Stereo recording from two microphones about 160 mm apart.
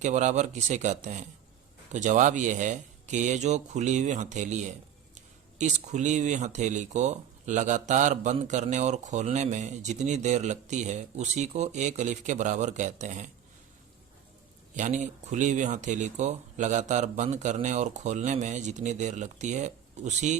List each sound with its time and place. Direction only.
0.0 s speech: 50° right (ahead or behind)
14.8 s speech: 50° right (ahead or behind)